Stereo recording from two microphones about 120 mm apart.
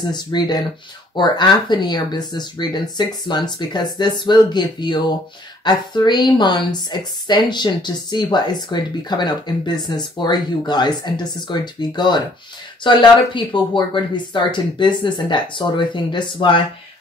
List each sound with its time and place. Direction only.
0.1 s a woman's voice: 35° left (ahead or behind)